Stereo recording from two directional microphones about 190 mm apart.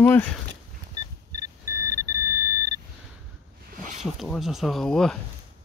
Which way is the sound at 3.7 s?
45° right (ahead or behind).